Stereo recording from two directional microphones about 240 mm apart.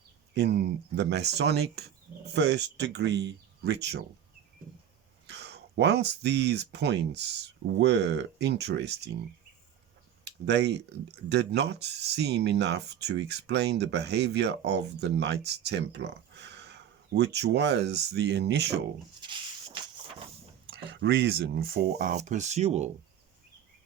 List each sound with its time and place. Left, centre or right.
0.3 s speech: right
5.2 s speech: right
10.2 s speech: right
20.7 s speech: right